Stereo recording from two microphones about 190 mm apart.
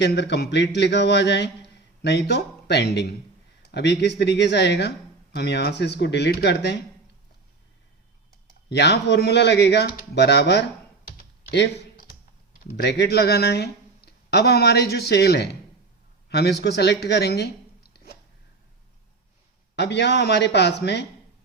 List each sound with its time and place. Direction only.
0.0 s speech: 65° left (ahead or behind)
8.7 s speech: 65° left (ahead or behind)
11.2 s typing: 65° left (ahead or behind)
12.7 s speech: 65° left (ahead or behind)
19.7 s speech: 65° left (ahead or behind)